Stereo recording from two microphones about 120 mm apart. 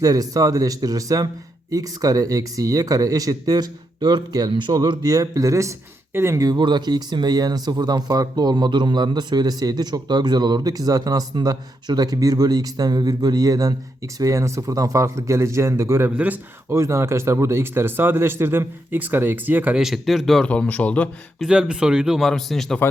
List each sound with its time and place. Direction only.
0.0 s speech: 30° right (ahead or behind); by 19.8 s 15° right (ahead or behind)
19.8 s speech: centre (ahead or behind)
20.5 s speech: 10° left (ahead or behind)
21.4 s speech: 5° right (ahead or behind)